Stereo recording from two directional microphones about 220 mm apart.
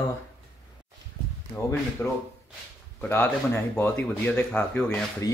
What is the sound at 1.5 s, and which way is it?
Speech, 10° left (ahead or behind).